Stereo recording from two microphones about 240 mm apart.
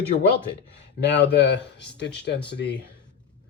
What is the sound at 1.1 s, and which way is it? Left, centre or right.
Speech, left.